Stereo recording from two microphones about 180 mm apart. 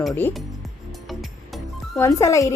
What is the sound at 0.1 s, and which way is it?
Speech, 10° left (ahead or behind).